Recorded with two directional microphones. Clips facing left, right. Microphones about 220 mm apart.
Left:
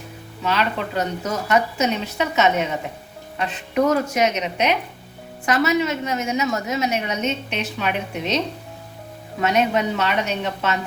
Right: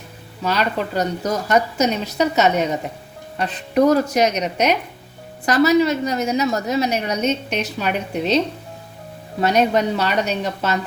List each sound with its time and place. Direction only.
0.4 s a woman's voice: 40° right (ahead or behind)
9.4 s a woman's voice: 35° right (ahead or behind)